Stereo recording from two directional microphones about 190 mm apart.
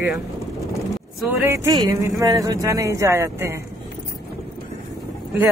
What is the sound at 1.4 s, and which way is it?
Speech, 15° right (ahead or behind).